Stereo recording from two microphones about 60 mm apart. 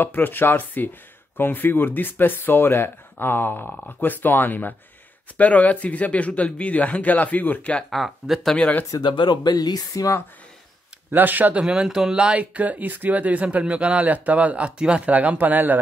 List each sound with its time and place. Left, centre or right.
0.0 s speech: left
7.9 s speech: centre
8.9 s speech: left
9.6 s speech: left
11.1 s speech: right
11.6 s speech: centre; by 15.8 s right